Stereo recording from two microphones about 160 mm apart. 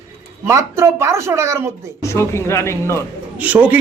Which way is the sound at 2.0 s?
15° left (ahead or behind).